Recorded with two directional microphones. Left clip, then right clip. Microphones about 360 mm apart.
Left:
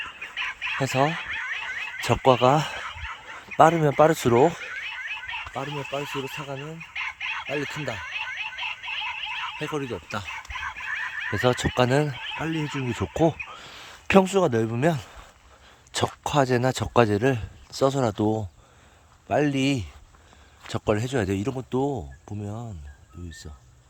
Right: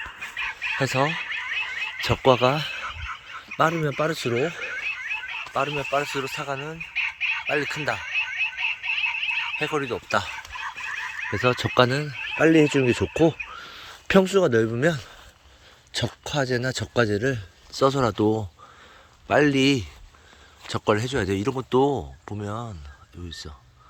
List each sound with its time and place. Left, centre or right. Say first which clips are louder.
0.0 s chicken: right 1 dB; centre
0.8 s a sound: even; centre
5.5 s speech: right 9 dB; centre
6.7 s chicken: right 4 dB; centre
7.4 s speech: right 5 dB; centre
8.0 s a sound: right 5 dB; centre
9.6 s speech: right 4 dB; centre
10.9 s fowl: left 2 dB; centre
11.3 s a man's voice: right 3 dB; centre